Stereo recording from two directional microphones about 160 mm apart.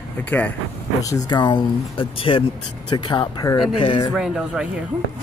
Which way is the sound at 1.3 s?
30° left (ahead or behind).